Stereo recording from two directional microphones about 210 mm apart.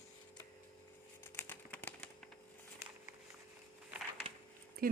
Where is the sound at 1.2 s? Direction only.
10° left (ahead or behind).